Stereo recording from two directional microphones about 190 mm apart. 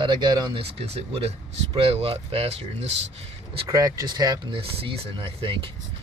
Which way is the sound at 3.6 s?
20° right (ahead or behind).